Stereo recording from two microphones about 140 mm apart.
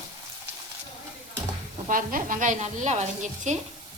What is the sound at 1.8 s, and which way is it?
Speech, 75° right (ahead or behind).